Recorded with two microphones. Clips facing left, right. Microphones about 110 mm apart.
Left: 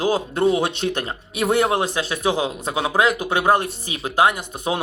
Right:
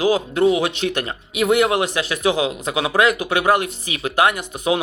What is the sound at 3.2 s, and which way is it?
Speech, 25° left (ahead or behind).